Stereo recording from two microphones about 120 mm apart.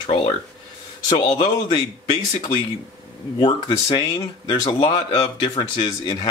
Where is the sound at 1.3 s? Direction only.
40° left (ahead or behind).